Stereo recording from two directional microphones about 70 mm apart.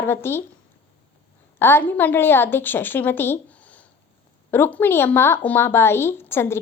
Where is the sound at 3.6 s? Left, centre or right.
Left.